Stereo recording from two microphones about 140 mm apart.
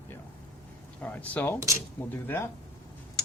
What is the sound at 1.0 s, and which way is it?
Speech, 10° left (ahead or behind).